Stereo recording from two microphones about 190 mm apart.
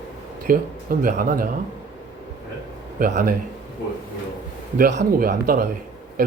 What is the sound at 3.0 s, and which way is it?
Speech, 50° right (ahead or behind).